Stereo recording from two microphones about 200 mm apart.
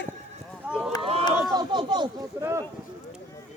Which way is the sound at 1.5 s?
20° right (ahead or behind).